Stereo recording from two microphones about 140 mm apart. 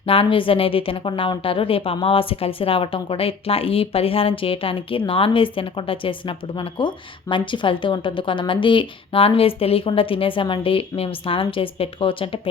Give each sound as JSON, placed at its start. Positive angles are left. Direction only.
{"t": 0.0, "sound": "a woman's voice", "side_deg": 40}